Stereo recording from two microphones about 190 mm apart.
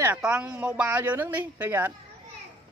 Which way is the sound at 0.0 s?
10° right (ahead or behind).